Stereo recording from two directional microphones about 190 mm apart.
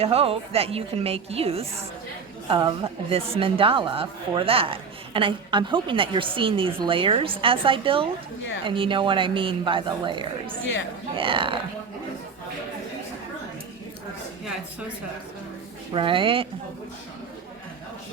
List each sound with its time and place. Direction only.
0.0 s a woman's voice: 30° right (ahead or behind)
15.9 s speech: 25° right (ahead or behind)